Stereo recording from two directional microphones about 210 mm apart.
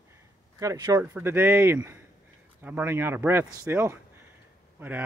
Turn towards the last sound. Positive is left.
turn(degrees=-10)  # may be behind; listen again after turning